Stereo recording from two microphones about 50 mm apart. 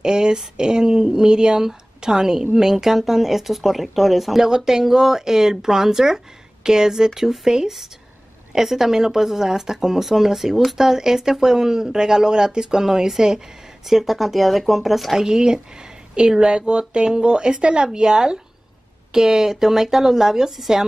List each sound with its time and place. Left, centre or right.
0.0 s speech: centre
15.2 s speech: centre